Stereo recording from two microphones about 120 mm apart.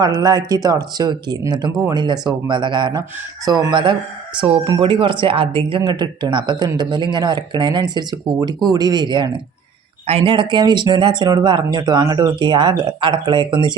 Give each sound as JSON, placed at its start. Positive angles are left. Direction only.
{"t": 0.0, "sound": "speech", "side_deg": -30}
{"t": 5.8, "sound": "speech", "side_deg": -35}
{"t": 10.1, "sound": "speech", "side_deg": -50}